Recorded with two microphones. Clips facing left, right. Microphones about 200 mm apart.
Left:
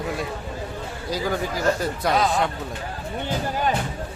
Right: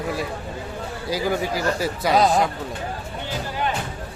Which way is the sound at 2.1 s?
35° right (ahead or behind).